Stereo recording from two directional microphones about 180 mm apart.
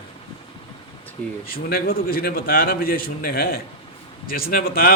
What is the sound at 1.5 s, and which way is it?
A man's voice, 55° left (ahead or behind).